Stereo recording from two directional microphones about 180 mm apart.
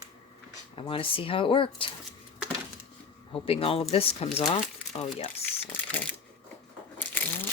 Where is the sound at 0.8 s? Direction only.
30° left (ahead or behind).